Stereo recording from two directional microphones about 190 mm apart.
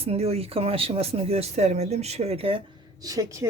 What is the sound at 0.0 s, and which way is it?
Speech, 35° right (ahead or behind).